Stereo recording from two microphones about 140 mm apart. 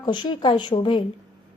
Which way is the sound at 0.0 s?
30° left (ahead or behind).